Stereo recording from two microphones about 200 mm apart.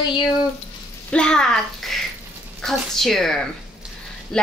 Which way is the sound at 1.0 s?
5° left (ahead or behind).